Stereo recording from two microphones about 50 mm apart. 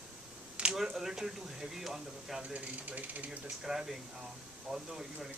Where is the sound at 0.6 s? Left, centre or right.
Right.